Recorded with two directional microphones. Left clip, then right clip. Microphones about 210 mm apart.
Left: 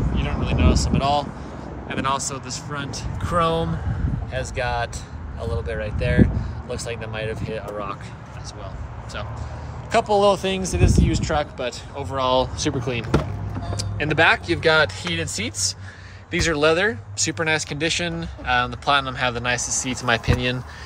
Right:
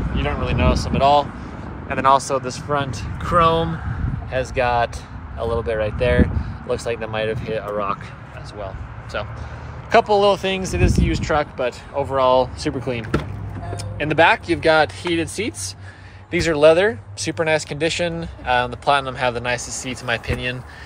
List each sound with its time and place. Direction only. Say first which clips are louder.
0.2 s speech: right 5 dB; 5° left (ahead or behind)
3.2 s speech: right 5 dB; 5° left (ahead or behind)
9.8 s speech: right 3 dB; 10° left (ahead or behind)
13.9 s speech: right 2 dB; 5° left (ahead or behind)
20.0 s speech: left 2 dB; 20° left (ahead or behind)